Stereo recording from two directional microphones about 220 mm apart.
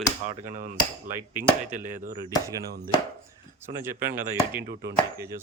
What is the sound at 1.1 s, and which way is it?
Speech, 10° right (ahead or behind).